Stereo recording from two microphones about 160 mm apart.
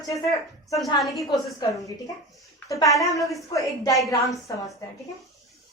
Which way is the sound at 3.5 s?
20° left (ahead or behind).